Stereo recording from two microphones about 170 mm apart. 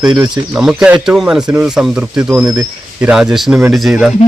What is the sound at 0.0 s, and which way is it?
Speech, 5° right (ahead or behind).